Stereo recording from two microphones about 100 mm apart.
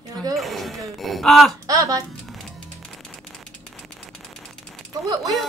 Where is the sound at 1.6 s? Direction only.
35° right (ahead or behind).